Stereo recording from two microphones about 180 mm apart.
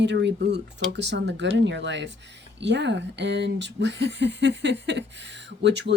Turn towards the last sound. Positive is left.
turn(degrees=-75)  # may be behind; listen again after turning